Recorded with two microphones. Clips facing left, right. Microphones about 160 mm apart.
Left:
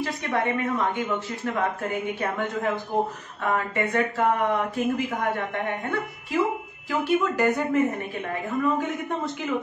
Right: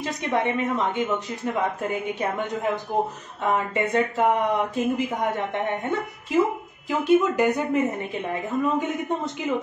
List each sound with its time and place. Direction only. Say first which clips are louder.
0.0 s a woman's voice: right 1 dB; 20° right (ahead or behind)